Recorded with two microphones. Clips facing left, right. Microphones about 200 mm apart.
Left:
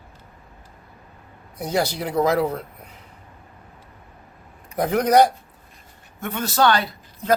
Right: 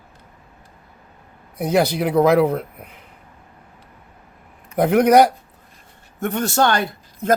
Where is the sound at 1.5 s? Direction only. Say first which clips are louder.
Right 5 dB; 60° right (ahead or behind).